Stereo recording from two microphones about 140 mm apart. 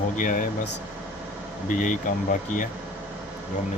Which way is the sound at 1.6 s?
65° left (ahead or behind).